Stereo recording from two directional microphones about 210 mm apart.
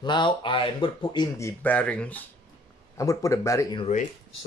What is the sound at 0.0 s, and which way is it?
Speech, 20° left (ahead or behind).